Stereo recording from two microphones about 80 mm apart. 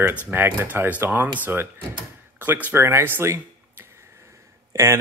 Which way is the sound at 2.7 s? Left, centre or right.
Right.